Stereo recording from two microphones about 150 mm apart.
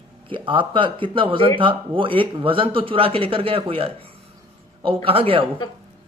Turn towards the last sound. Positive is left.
turn(degrees=-35)  # may be behind; listen again after turning